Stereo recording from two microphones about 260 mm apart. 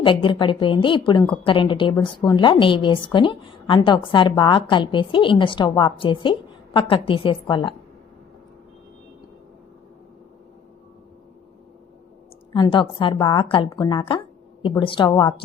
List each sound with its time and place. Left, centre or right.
0.0 s a woman's voice: centre
12.5 s a woman's voice: centre